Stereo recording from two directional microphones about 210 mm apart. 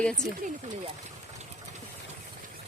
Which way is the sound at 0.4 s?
35° right (ahead or behind).